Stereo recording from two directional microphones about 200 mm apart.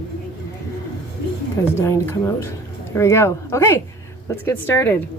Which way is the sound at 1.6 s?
15° left (ahead or behind).